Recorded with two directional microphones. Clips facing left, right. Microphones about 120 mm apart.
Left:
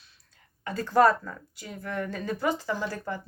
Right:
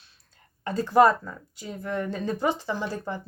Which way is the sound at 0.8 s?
15° right (ahead or behind).